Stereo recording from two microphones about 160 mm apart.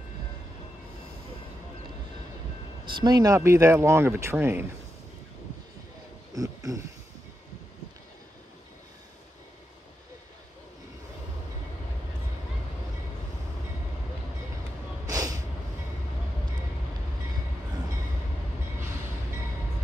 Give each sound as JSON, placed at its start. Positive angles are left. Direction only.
{"t": 2.8, "sound": "speech", "side_deg": -30}
{"t": 6.3, "sound": "speech", "side_deg": -20}
{"t": 15.0, "sound": "snort", "side_deg": -20}